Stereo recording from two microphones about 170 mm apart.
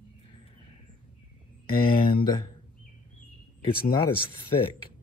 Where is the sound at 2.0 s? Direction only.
25° left (ahead or behind).